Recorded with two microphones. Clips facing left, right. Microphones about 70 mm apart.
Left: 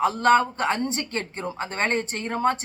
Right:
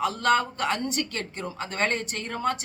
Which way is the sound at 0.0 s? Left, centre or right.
Left.